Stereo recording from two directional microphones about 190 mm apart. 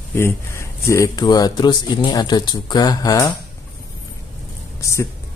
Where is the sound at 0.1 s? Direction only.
15° left (ahead or behind).